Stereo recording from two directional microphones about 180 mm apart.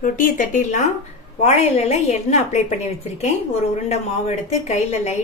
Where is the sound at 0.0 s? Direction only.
50° left (ahead or behind).